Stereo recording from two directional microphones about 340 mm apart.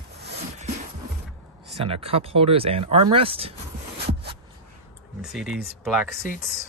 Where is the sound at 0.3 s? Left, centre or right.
Centre.